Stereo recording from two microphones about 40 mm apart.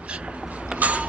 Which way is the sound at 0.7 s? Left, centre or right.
Right.